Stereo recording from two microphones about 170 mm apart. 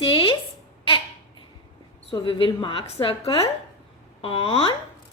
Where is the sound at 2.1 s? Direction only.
30° left (ahead or behind).